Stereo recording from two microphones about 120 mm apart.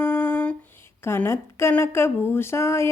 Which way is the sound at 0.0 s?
15° left (ahead or behind).